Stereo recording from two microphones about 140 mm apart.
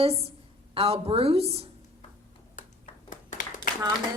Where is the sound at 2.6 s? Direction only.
70° left (ahead or behind).